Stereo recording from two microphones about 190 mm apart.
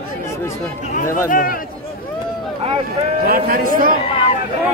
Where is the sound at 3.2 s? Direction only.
50° right (ahead or behind).